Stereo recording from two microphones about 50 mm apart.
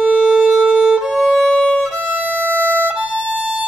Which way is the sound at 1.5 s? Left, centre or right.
Centre.